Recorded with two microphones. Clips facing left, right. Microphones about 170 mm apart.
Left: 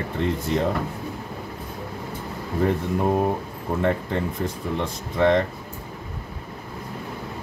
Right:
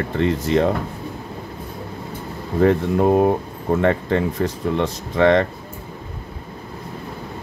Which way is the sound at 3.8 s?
75° right (ahead or behind).